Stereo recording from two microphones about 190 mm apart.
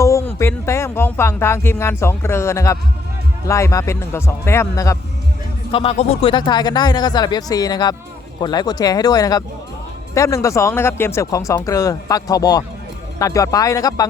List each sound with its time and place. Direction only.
0.0 s speech: 15° left (ahead or behind)
5.7 s speech: 30° left (ahead or behind)